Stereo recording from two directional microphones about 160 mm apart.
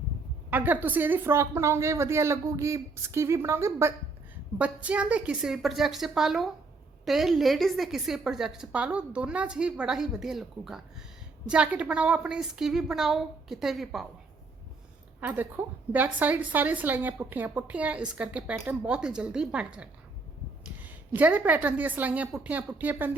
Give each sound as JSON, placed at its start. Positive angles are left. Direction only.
{"t": 0.5, "sound": "a woman's voice", "side_deg": -10}
{"t": 15.2, "sound": "a woman's voice", "side_deg": -10}